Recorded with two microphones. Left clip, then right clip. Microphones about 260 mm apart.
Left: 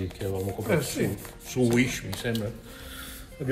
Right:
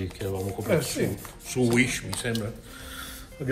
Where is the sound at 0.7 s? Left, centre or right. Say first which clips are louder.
Right 2 dB; centre.